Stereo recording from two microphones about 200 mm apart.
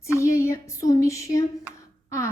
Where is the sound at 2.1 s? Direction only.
15° left (ahead or behind).